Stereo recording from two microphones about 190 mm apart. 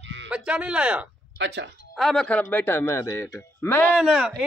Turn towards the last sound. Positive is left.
turn(degrees=-5)  # may be behind; listen again after turning